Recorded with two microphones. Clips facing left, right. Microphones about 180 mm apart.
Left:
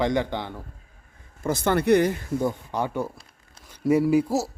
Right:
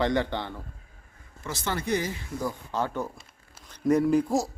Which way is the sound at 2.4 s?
20° left (ahead or behind).